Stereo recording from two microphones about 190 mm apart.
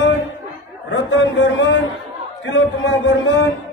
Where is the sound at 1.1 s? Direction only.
75° left (ahead or behind).